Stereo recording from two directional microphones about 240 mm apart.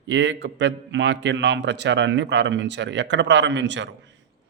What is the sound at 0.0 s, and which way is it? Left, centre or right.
A man's voice, right.